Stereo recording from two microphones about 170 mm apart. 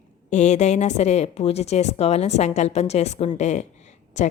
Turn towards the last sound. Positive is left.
turn(degrees=45)  # may be behind; listen again after turning